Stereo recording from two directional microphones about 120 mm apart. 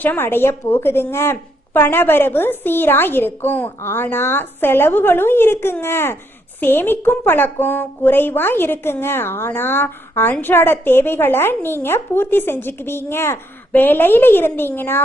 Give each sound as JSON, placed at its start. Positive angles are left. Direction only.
{"t": 0.0, "sound": "speech", "side_deg": 15}